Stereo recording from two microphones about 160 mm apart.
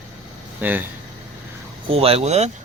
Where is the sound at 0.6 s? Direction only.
10° right (ahead or behind).